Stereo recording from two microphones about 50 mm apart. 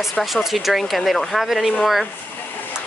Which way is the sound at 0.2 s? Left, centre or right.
Centre.